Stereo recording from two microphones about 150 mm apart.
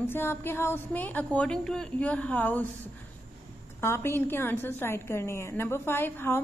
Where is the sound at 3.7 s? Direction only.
15° left (ahead or behind).